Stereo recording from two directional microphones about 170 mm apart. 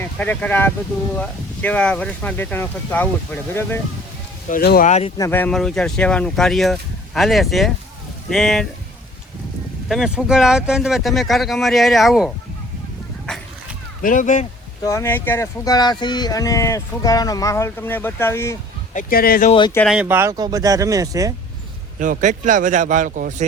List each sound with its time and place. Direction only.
0.0 s speech: 10° left (ahead or behind)
4.4 s speech: 60° left (ahead or behind)
4.9 s speech: 40° left (ahead or behind)
5.1 s speech: 15° left (ahead or behind)
9.9 s speech: 5° right (ahead or behind)
14.0 s speech: 50° left (ahead or behind)
14.8 s speech: 15° left (ahead or behind)
18.9 s speech: 60° left (ahead or behind)
19.5 s speech: 30° left (ahead or behind)
19.9 s speech: 10° right (ahead or behind)
21.9 s speech: 50° right (ahead or behind)